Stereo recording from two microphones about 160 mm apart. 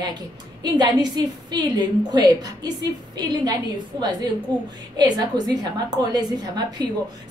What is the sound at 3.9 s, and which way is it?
A woman's voice, 25° right (ahead or behind).